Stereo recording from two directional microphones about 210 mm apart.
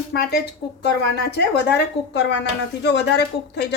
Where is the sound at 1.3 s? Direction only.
55° left (ahead or behind).